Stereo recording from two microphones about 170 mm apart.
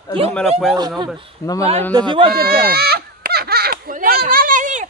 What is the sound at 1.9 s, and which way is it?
Speech, 30° right (ahead or behind).